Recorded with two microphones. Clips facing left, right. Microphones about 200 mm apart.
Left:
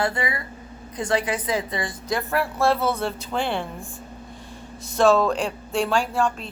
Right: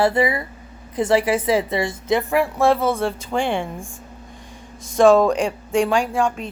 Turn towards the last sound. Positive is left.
turn(degrees=-15)  # may be behind; listen again after turning